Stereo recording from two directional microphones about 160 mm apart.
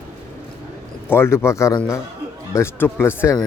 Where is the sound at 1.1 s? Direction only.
15° left (ahead or behind).